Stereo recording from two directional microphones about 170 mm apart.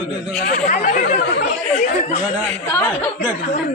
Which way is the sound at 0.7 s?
50° left (ahead or behind).